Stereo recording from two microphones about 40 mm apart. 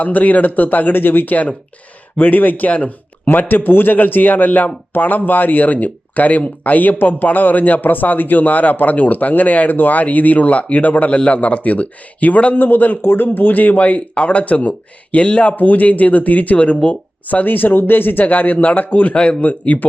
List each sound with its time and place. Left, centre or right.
0.0 s a man's voice: left
3.2 s a man's voice: left
12.5 s a man's voice: left
13.0 s speech: left
15.5 s a man's voice: left
17.2 s a man's voice: left
19.1 s speech: left
19.4 s speech: left